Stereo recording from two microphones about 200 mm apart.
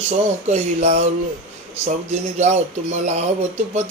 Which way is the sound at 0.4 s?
35° right (ahead or behind).